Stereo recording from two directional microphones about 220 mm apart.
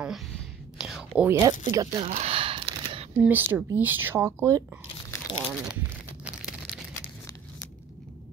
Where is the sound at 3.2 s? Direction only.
10° right (ahead or behind).